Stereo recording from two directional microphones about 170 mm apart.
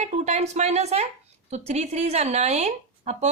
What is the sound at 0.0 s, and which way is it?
A woman's voice, 40° right (ahead or behind).